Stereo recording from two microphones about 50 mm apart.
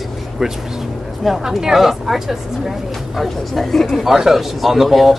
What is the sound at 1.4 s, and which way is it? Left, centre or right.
Speech, centre.